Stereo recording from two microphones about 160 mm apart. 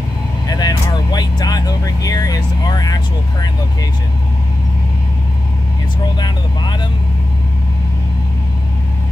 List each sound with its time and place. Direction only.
0.5 s vehicle: 25° left (ahead or behind)
2.0 s speech: 20° left (ahead or behind)
6.1 s speech: 25° left (ahead or behind)